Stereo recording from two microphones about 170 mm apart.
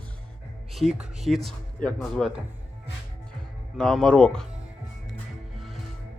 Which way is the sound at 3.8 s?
5° left (ahead or behind).